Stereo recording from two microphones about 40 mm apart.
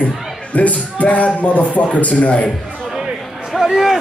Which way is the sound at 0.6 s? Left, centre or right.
Left.